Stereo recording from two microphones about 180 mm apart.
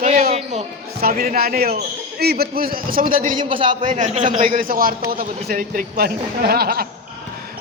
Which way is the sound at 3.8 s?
45° right (ahead or behind).